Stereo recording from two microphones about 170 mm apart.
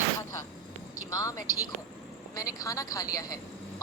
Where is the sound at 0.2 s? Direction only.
20° left (ahead or behind).